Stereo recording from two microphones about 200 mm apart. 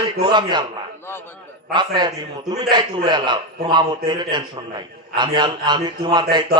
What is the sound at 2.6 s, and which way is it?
A man's voice, 20° right (ahead or behind).